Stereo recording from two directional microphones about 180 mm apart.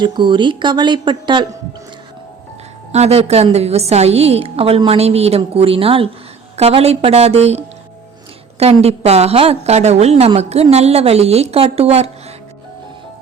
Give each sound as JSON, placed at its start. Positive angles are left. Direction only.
{"t": 0.0, "sound": "speech", "side_deg": -25}
{"t": 2.9, "sound": "a woman's voice", "side_deg": -35}